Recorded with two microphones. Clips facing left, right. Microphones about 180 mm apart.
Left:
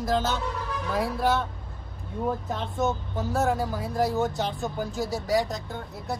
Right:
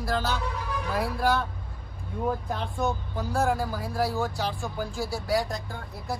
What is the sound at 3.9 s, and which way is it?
Speech, 20° left (ahead or behind).